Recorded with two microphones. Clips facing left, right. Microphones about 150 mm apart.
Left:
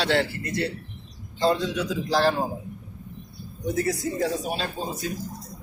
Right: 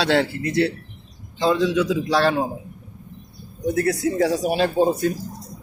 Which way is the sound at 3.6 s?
60° right (ahead or behind).